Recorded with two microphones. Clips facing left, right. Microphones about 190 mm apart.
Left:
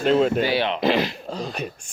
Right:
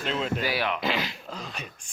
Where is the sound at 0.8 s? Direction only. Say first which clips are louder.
Left 8 dB; 40° left (ahead or behind).